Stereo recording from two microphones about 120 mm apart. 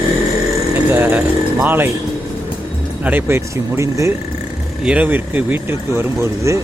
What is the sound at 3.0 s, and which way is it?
Speech, 20° right (ahead or behind).